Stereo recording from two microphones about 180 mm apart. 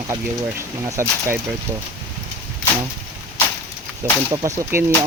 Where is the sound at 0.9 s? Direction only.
15° right (ahead or behind).